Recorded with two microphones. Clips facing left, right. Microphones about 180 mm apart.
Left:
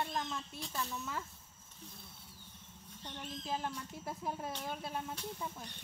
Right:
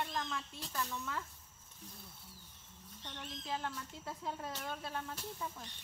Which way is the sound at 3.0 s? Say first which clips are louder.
Left 3 dB; 10° left (ahead or behind).